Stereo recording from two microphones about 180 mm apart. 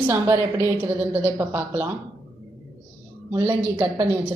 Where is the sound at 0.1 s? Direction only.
15° right (ahead or behind).